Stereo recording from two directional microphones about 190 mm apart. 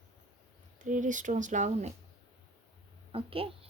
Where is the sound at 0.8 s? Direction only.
40° right (ahead or behind).